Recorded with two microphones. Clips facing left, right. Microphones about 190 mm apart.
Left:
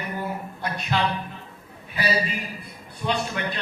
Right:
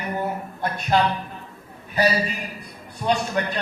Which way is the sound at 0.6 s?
45° right (ahead or behind).